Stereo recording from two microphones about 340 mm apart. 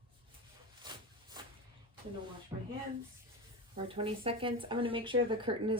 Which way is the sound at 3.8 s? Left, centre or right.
Centre.